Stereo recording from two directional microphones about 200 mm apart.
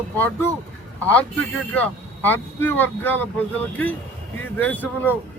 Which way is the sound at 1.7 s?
10° left (ahead or behind).